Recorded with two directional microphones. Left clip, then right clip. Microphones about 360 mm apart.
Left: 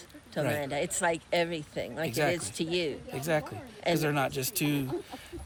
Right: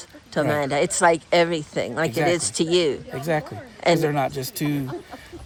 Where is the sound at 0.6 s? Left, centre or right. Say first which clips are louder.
Right 11 dB; centre.